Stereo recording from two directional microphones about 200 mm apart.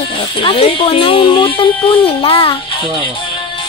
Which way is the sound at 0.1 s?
25° left (ahead or behind).